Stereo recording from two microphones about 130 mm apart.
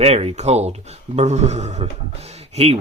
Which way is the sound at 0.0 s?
50° right (ahead or behind).